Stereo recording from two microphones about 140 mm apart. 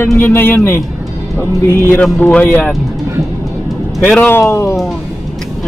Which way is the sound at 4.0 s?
10° left (ahead or behind).